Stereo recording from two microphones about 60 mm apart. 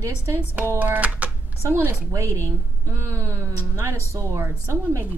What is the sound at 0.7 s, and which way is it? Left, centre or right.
Speech, right.